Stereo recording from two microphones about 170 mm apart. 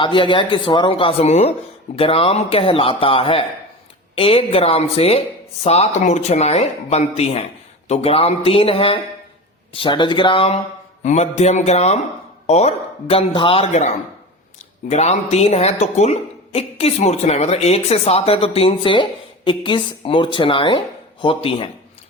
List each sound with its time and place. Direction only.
0.0 s speech: 30° left (ahead or behind)